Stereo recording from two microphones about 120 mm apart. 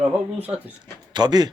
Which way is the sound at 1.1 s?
35° right (ahead or behind).